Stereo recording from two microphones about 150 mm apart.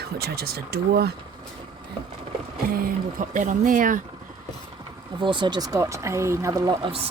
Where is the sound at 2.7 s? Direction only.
75° right (ahead or behind).